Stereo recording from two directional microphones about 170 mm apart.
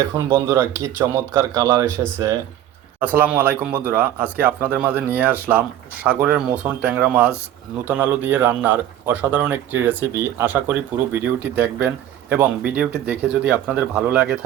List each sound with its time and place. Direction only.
0.3 s speech: 20° right (ahead or behind)